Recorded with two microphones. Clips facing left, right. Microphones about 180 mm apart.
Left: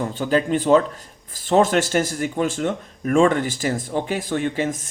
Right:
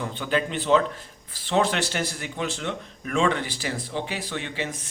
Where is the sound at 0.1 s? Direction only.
40° left (ahead or behind).